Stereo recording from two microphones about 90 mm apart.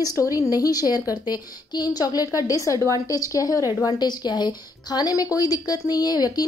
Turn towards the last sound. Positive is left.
turn(degrees=45)  # may be behind; listen again after turning